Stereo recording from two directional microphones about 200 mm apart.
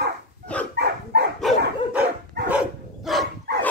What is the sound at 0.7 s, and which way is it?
Dog, 55° right (ahead or behind).